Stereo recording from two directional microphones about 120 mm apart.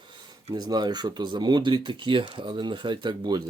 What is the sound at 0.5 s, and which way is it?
Speech, 35° right (ahead or behind).